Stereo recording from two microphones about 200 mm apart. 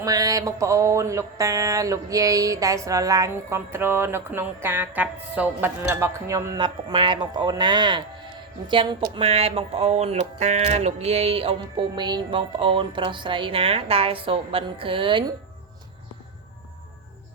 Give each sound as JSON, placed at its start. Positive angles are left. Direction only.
{"t": 0.0, "sound": "mantra", "side_deg": -20}
{"t": 8.7, "sound": "a woman's voice", "side_deg": -20}